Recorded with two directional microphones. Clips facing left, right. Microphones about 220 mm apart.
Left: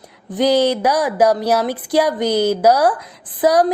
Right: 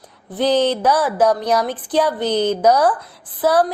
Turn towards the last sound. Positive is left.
turn(degrees=15)  # may be behind; listen again after turning